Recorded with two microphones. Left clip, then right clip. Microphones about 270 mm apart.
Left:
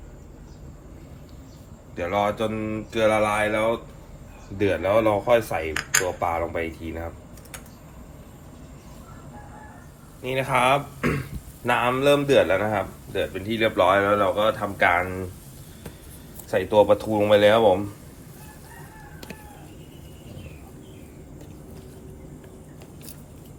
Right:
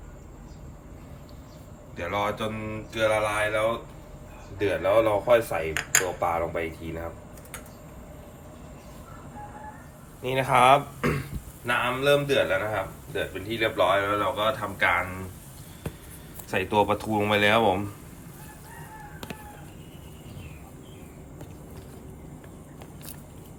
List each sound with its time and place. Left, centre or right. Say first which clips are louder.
2.0 s speech: left 5 dB; centre; by 7.1 s left
10.2 s speech: right 2 dB; centre
11.6 s speech: left 4 dB; centre
16.7 s speech: left 6 dB; centre